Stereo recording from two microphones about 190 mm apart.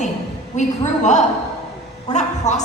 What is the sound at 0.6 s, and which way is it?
Speech, 40° left (ahead or behind).